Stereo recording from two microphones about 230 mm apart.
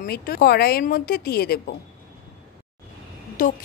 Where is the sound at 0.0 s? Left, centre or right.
Left.